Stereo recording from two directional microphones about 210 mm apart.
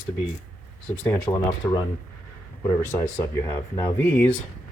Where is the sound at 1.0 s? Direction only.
10° left (ahead or behind).